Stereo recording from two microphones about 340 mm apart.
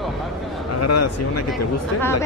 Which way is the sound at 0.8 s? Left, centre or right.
Left.